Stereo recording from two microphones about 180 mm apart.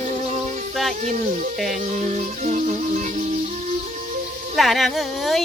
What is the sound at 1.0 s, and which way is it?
Speech, 45° right (ahead or behind).